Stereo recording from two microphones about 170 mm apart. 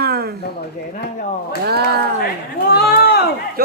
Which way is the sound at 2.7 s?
70° left (ahead or behind).